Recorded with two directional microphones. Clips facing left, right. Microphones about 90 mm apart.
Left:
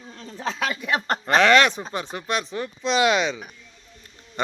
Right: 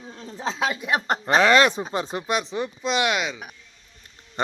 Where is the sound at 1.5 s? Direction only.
25° right (ahead or behind).